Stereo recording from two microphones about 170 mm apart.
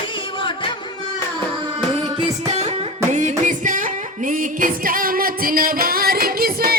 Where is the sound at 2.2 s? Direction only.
40° right (ahead or behind).